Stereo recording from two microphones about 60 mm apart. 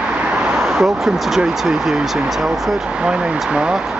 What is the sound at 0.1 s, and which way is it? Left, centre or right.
Vehicle, centre.